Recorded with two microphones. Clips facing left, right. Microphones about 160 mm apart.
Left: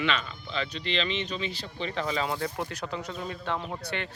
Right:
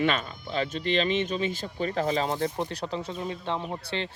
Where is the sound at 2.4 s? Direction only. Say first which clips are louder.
Right 3 dB; 20° right (ahead or behind).